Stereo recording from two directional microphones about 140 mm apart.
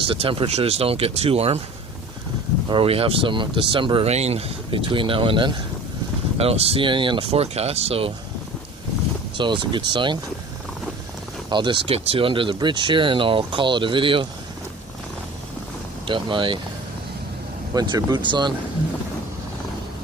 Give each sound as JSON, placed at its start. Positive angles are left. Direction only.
{"t": 0.1, "sound": "speech", "side_deg": -40}
{"t": 2.6, "sound": "speech", "side_deg": -40}
{"t": 9.4, "sound": "speech", "side_deg": -35}
{"t": 11.4, "sound": "speech", "side_deg": -35}
{"t": 16.0, "sound": "speech", "side_deg": -35}
{"t": 17.7, "sound": "speech", "side_deg": -30}